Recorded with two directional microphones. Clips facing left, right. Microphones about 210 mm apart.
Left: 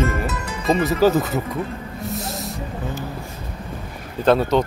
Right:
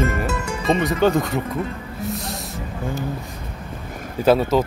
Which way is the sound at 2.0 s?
Centre (ahead or behind).